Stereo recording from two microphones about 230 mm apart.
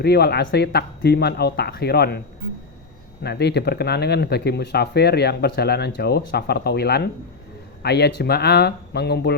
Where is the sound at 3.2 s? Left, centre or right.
Left.